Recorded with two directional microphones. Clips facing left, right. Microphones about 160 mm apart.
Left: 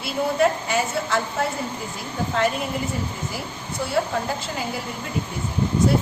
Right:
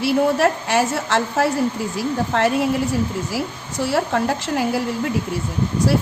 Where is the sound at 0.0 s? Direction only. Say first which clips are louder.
Right 4 dB; 80° right.